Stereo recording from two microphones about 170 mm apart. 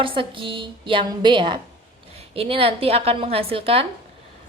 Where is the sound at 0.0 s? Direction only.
30° right (ahead or behind).